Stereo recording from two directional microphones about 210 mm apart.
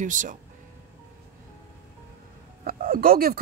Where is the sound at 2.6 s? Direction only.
40° right (ahead or behind).